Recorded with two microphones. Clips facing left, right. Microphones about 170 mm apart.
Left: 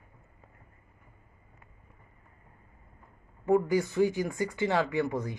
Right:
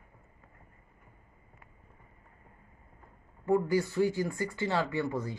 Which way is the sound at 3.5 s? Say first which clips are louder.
Left 2 dB; 20° left (ahead or behind).